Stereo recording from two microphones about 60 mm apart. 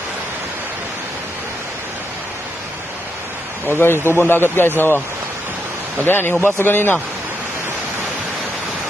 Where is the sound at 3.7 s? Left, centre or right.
Left.